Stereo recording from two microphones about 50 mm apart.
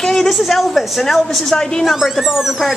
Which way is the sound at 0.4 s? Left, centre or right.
Centre.